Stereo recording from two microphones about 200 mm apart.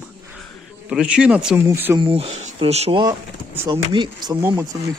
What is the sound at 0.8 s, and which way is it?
A man's voice, 5° right (ahead or behind).